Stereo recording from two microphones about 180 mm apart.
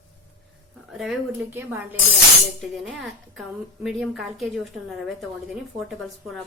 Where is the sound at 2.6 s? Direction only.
Centre (ahead or behind).